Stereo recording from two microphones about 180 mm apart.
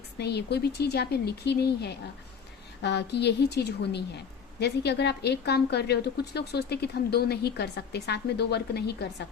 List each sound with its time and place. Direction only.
0.2 s a woman's voice: 65° left (ahead or behind)